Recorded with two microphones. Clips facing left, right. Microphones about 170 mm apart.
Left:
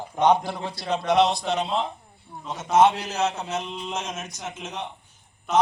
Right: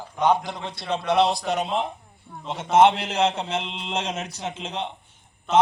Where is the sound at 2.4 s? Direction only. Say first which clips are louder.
Right 2 dB; 25° right (ahead or behind).